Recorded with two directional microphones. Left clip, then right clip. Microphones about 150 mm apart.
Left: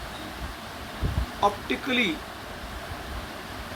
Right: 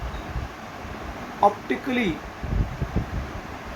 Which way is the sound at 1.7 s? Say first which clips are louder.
Even; 30° right (ahead or behind).